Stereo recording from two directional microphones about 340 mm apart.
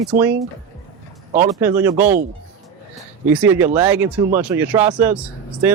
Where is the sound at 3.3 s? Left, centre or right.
Centre.